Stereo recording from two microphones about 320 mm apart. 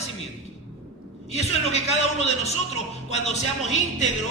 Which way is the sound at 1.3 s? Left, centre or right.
Centre.